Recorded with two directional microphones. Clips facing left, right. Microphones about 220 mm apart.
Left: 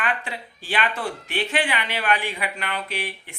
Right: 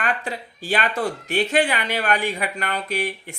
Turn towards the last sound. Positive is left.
turn(degrees=-40)  # may be behind; listen again after turning